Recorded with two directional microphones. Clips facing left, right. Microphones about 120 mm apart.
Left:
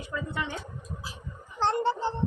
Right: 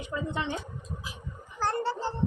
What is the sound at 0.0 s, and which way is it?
Speech, 20° right (ahead or behind).